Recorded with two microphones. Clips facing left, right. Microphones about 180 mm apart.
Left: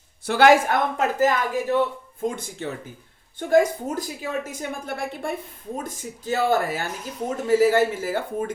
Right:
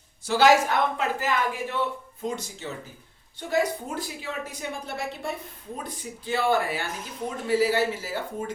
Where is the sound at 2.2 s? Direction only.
50° left (ahead or behind).